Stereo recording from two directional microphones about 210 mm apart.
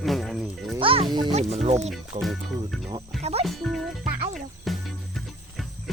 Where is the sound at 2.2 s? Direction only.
Centre (ahead or behind).